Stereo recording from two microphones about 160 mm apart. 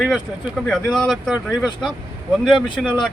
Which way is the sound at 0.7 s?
5° left (ahead or behind).